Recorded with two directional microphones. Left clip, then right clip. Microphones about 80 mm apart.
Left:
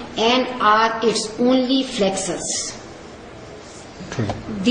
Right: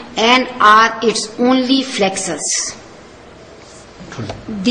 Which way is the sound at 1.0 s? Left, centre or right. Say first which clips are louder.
Right 3 dB; right.